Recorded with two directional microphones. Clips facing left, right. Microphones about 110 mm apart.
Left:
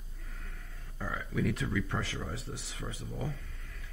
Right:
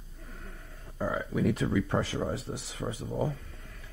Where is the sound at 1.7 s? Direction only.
25° right (ahead or behind).